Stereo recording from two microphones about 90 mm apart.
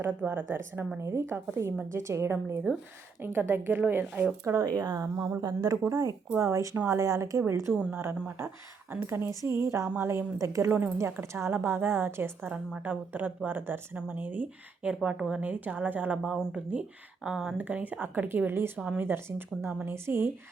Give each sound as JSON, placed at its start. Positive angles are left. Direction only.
{"t": 0.2, "sound": "speech", "side_deg": -20}
{"t": 4.4, "sound": "speech", "side_deg": -35}
{"t": 4.8, "sound": "speech", "side_deg": -45}
{"t": 5.9, "sound": "speech", "side_deg": -40}
{"t": 7.8, "sound": "a woman's voice", "side_deg": -15}
{"t": 8.9, "sound": "speech", "side_deg": -25}
{"t": 10.3, "sound": "a woman's voice", "side_deg": -35}
{"t": 16.1, "sound": "a woman's voice", "side_deg": -5}
{"t": 17.6, "sound": "speech", "side_deg": -20}